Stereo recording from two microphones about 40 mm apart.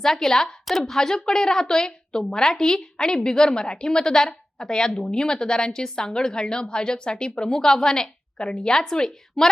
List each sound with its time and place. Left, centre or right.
0.0 s a woman's voice: centre
0.6 s a woman's voice: centre